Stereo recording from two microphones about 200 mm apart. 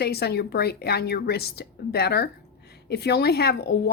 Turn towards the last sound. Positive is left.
turn(degrees=55)  # may be behind; listen again after turning